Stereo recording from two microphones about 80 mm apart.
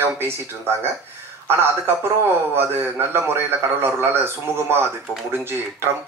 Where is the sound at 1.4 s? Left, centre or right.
Right.